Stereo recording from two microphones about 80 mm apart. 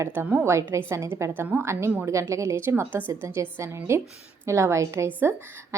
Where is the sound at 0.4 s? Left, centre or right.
Right.